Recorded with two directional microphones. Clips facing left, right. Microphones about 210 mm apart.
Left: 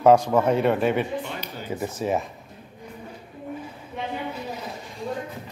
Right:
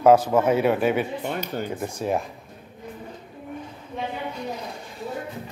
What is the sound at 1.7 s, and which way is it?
Speech, 5° left (ahead or behind).